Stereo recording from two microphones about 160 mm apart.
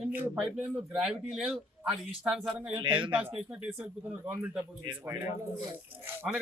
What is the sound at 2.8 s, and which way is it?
Speech, 30° right (ahead or behind).